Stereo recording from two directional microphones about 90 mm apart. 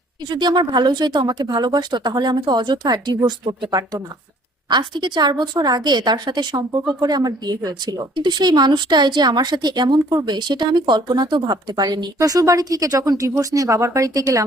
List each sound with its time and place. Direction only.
0.3 s a woman's voice: 55° right (ahead or behind); by 14.4 s 40° right (ahead or behind)